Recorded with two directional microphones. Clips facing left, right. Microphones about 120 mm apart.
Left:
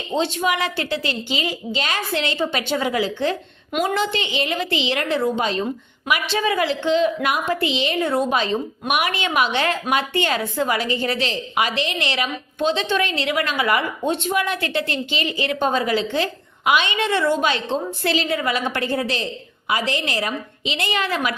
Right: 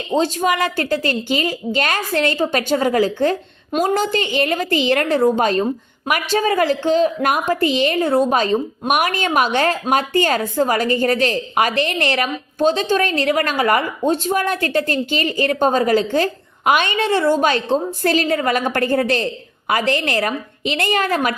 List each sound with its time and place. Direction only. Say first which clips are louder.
0.2 s a woman's voice: right 3 dB; 40° right (ahead or behind)